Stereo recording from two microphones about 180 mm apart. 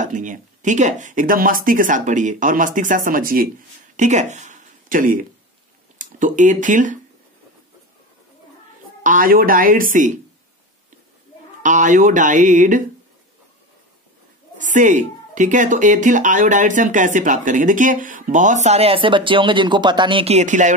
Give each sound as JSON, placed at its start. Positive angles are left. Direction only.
{"t": 0.0, "sound": "speech", "side_deg": -45}
{"t": 3.9, "sound": "a sound", "side_deg": -40}
{"t": 5.9, "sound": "speech", "side_deg": -45}
{"t": 9.0, "sound": "speech", "side_deg": -50}
{"t": 11.6, "sound": "speech", "side_deg": -45}
{"t": 14.6, "sound": "speech", "side_deg": -45}